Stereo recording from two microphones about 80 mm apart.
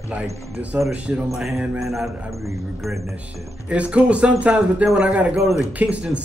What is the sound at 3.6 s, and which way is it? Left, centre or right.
Speech, centre.